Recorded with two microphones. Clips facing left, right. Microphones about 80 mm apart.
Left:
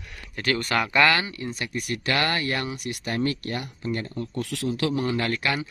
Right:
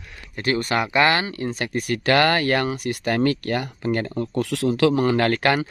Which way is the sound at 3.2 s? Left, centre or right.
Right.